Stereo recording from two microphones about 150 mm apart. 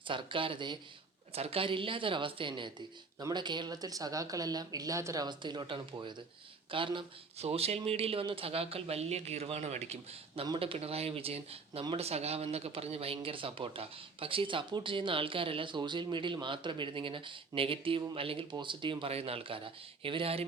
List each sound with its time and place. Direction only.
0.1 s speech: 35° right (ahead or behind)
10.4 s speech: 35° right (ahead or behind)